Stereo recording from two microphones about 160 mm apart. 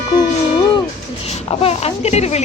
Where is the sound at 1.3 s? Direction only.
40° left (ahead or behind).